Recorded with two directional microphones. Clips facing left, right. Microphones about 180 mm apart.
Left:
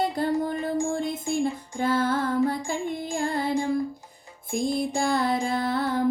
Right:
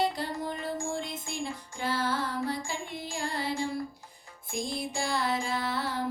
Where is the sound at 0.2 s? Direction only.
50° left (ahead or behind).